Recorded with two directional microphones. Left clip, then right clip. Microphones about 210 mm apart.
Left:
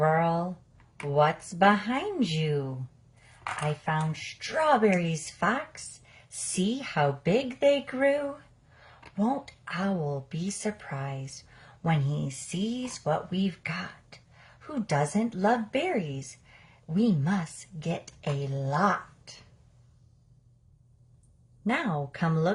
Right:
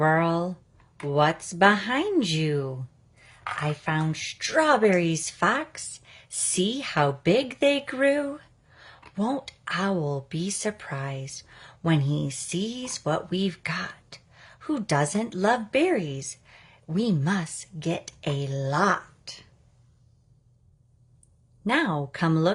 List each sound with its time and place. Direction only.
0.0 s a sound: 40° right (ahead or behind)
1.1 s speech: 40° right (ahead or behind)
3.7 s speech: 45° right (ahead or behind)
21.6 s speech: 35° right (ahead or behind)